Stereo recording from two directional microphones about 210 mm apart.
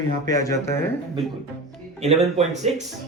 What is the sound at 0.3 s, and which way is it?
Speech, 15° left (ahead or behind).